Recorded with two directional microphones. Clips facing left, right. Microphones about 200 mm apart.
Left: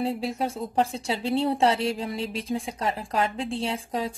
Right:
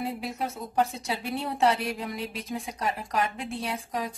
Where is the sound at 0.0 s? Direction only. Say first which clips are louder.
Left 5 dB; 30° left (ahead or behind).